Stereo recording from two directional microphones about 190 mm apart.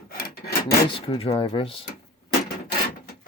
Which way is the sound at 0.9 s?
30° left (ahead or behind).